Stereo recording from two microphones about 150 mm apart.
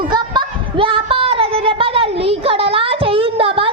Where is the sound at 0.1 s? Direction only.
35° right (ahead or behind).